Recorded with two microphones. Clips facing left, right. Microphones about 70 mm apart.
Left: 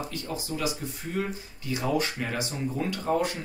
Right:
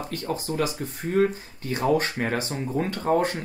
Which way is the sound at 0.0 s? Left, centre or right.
Right.